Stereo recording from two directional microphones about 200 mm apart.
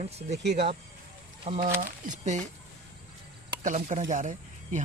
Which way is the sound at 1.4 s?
30° right (ahead or behind).